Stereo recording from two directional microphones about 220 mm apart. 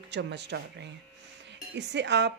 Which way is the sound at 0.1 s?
50° right (ahead or behind).